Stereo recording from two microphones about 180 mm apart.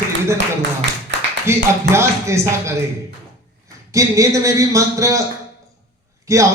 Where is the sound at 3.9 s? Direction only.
15° right (ahead or behind).